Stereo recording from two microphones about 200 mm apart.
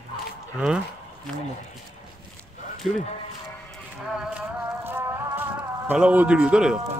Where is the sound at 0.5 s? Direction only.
5° right (ahead or behind).